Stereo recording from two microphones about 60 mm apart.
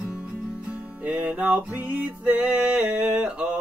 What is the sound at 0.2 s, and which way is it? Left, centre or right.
Music, right.